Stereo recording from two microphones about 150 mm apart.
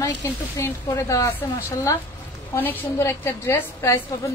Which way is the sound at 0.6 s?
20° left (ahead or behind).